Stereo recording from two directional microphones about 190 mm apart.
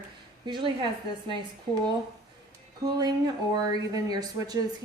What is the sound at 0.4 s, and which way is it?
Speech, 25° right (ahead or behind).